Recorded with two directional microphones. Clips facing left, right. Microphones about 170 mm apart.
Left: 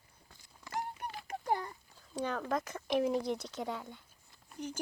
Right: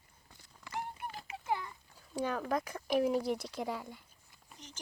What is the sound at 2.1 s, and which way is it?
Speech, 5° right (ahead or behind).